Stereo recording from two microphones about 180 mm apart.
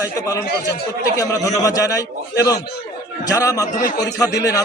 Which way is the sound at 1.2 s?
20° left (ahead or behind).